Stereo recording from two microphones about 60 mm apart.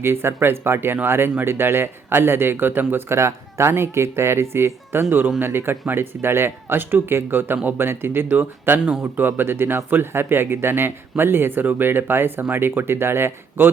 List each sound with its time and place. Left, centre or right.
0.0 s speech: right
3.2 s speech: right